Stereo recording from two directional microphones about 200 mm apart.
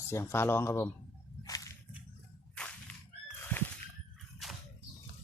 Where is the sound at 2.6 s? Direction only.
5° left (ahead or behind).